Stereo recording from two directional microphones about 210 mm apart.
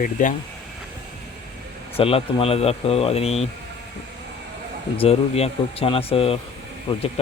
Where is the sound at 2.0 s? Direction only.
25° left (ahead or behind).